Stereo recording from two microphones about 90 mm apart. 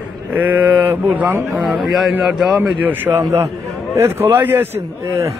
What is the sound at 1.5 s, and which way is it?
A man's voice, centre (ahead or behind).